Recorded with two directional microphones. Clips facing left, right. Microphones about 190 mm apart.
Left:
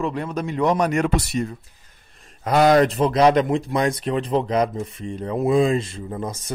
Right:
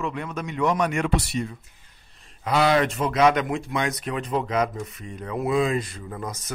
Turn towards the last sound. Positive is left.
turn(degrees=30)  # may be behind; listen again after turning